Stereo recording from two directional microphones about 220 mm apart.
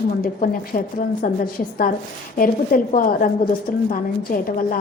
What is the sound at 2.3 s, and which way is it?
Speech, 40° left (ahead or behind).